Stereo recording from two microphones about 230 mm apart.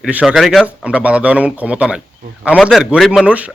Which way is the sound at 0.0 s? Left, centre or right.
Centre.